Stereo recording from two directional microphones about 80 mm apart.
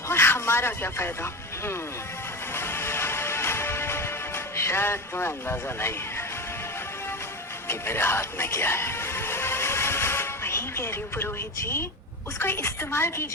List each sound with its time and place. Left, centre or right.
0.1 s speech: left
2.5 s music: left
7.7 s music: left
12.4 s a woman's voice: left